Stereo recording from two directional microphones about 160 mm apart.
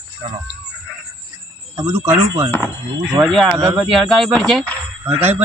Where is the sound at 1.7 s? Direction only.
15° right (ahead or behind).